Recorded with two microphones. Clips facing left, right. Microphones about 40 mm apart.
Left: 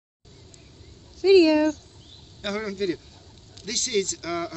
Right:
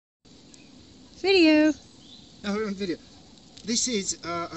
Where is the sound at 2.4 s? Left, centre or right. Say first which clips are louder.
Left 2 dB; left.